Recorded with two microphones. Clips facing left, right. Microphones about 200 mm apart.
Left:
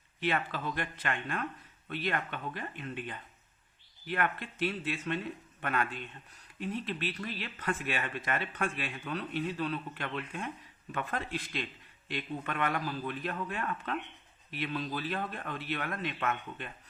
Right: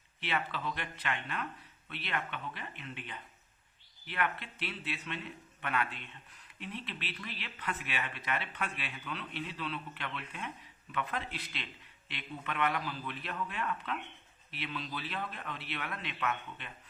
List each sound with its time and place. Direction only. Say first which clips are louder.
0.2 s speech: left 4 dB; 45° left (ahead or behind)